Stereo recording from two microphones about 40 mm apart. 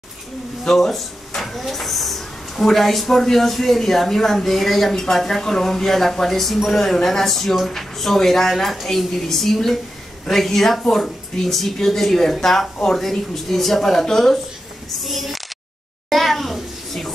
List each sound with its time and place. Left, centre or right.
0.7 s a woman's voice: centre
15.0 s speech: centre
16.1 s a sound: centre